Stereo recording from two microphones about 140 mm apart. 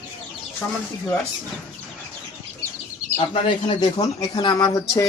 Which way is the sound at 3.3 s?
35° left (ahead or behind).